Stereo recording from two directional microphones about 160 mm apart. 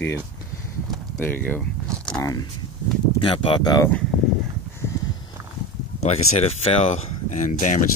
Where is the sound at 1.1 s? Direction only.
10° left (ahead or behind).